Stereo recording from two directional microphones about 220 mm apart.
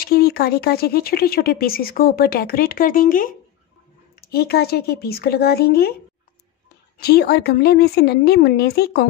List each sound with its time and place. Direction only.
0.0 s speech: 45° left (ahead or behind)
7.0 s speech: 45° left (ahead or behind)